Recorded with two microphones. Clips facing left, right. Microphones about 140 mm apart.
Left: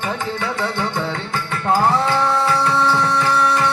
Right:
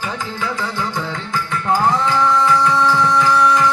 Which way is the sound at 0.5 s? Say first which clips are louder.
Left 2 dB; 65° left (ahead or behind).